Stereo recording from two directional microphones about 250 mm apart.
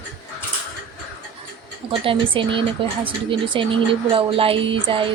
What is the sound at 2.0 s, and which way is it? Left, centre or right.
Speech, right.